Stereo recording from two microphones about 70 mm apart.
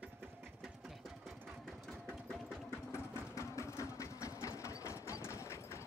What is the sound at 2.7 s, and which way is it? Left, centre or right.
Sewing machine, left.